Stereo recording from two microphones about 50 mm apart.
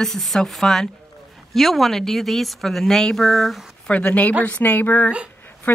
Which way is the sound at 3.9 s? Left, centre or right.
Left.